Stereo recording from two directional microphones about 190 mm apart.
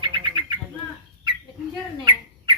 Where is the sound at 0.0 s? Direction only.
25° right (ahead or behind).